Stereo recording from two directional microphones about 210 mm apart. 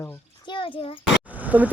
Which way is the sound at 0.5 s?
25° left (ahead or behind).